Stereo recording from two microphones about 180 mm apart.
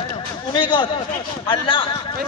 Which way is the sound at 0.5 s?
25° left (ahead or behind).